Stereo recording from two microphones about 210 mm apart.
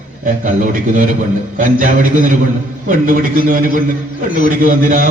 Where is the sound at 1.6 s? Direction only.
40° right (ahead or behind).